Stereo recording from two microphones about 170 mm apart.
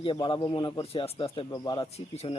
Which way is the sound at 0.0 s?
30° left (ahead or behind).